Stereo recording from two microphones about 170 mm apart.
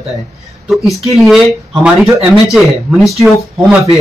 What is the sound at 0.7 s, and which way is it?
Speech, centre (ahead or behind).